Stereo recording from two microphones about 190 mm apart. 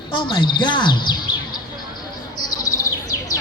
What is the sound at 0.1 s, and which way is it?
Speech, 25° left (ahead or behind).